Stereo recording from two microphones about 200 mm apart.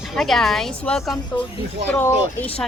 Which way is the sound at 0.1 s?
Centre (ahead or behind).